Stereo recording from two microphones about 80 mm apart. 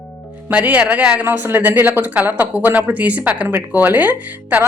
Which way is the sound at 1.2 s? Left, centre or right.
Right.